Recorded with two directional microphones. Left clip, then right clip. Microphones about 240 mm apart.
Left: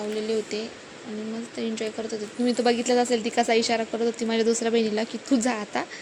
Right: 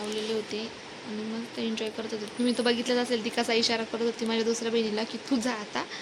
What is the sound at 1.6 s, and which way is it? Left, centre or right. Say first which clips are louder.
Speech: left 3 dB; centre.